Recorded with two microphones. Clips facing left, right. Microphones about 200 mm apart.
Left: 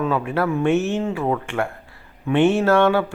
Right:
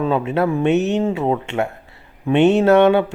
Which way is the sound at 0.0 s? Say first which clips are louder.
Right 3 dB; 25° right (ahead or behind).